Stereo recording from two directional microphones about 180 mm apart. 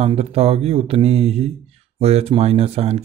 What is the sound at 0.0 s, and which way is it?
Speech, 35° right (ahead or behind).